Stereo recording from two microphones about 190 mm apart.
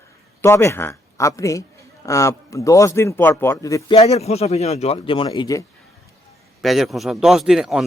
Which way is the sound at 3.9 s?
30° left (ahead or behind).